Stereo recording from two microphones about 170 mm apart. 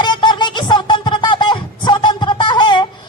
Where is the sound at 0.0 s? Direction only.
25° left (ahead or behind).